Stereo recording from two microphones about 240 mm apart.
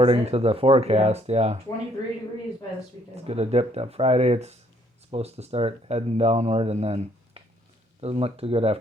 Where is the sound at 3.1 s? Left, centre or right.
Right.